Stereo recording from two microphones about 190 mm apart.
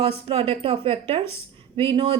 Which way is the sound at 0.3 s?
30° right (ahead or behind).